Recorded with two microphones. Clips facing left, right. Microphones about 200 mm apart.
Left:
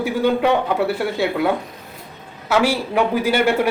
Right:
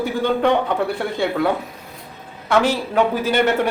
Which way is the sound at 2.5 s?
10° left (ahead or behind).